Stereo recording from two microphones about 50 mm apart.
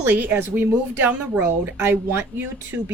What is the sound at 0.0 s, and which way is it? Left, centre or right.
Speech, right.